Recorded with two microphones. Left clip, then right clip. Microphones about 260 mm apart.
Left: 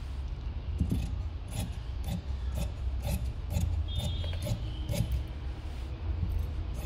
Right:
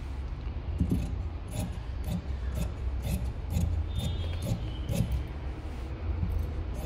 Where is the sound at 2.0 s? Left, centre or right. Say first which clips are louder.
Right 2 dB; right.